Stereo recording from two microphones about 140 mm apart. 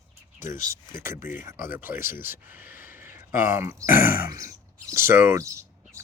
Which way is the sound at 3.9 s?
90° left.